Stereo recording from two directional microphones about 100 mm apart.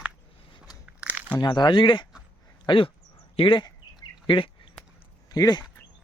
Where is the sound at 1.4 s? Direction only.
50° left (ahead or behind).